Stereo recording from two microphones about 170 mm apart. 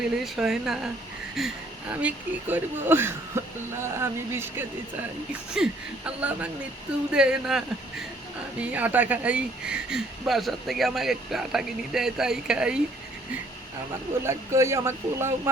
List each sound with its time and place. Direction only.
0.3 s speech: 5° right (ahead or behind)
5.6 s speech: 5° right (ahead or behind)
14.3 s speech: 15° right (ahead or behind)